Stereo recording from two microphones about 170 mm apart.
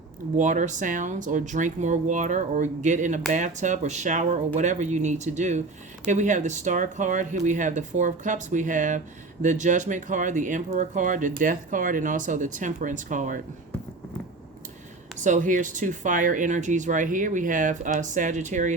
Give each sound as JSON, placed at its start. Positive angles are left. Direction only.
{"t": 0.3, "sound": "speech", "side_deg": -45}
{"t": 15.2, "sound": "speech", "side_deg": -50}